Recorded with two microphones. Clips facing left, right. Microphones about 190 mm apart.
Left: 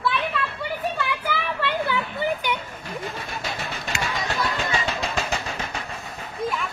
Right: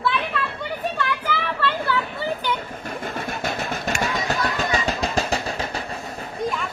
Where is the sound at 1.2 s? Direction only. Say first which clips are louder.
Right 1 dB; 15° left (ahead or behind).